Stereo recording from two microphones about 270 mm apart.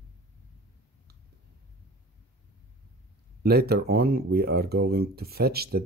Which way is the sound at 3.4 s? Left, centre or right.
Right.